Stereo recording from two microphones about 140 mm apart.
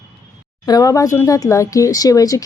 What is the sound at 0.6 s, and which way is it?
A woman's voice, 25° left (ahead or behind).